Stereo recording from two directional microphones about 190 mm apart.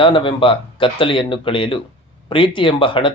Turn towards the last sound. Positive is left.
turn(degrees=25)  # may be behind; listen again after turning